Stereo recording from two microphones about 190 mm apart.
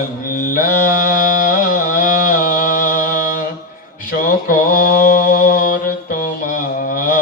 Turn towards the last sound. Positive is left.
turn(degrees=45)  # may be behind; listen again after turning